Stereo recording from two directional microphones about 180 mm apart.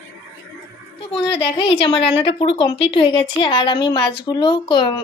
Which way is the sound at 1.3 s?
30° left (ahead or behind).